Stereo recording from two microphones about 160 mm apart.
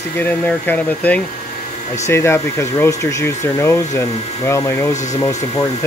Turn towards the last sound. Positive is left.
turn(degrees=25)  # may be behind; listen again after turning